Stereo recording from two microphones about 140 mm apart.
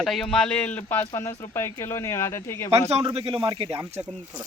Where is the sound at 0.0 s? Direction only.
Centre (ahead or behind); by 2.6 s 20° left (ahead or behind).